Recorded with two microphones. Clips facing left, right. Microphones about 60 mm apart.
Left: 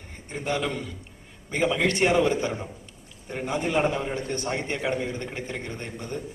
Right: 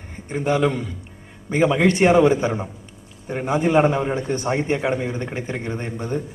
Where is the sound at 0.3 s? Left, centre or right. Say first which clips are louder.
Right 8 dB; centre.